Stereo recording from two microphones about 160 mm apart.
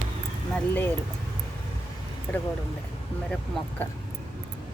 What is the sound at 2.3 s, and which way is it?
Speech, 10° left (ahead or behind).